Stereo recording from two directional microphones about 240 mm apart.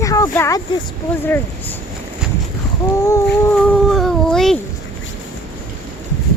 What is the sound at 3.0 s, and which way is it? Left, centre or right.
Speech, centre.